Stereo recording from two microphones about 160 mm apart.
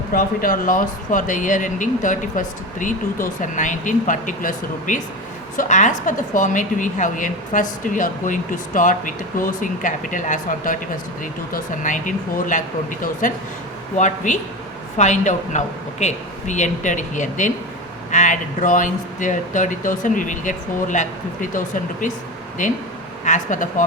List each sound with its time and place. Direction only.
0.1 s a woman's voice: 60° left (ahead or behind)
22.6 s speech: 55° left (ahead or behind)